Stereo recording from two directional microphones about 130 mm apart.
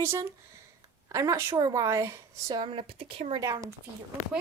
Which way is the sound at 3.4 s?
30° right (ahead or behind).